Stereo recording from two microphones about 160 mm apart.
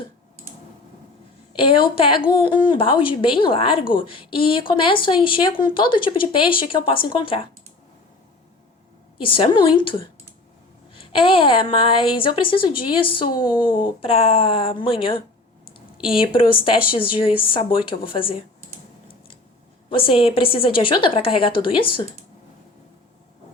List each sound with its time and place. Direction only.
1.5 s a woman's voice: 35° left (ahead or behind)
9.2 s a woman's voice: 35° left (ahead or behind)
13.6 s speech: 60° left (ahead or behind)
14.0 s a woman's voice: 35° left (ahead or behind)
16.2 s a woman's voice: 35° left (ahead or behind)
19.9 s a woman's voice: 35° left (ahead or behind)